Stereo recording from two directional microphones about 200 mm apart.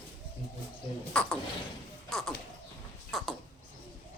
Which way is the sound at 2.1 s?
Centre (ahead or behind).